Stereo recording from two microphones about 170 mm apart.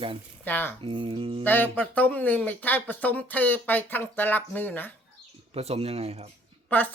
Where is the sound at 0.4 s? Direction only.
10° left (ahead or behind).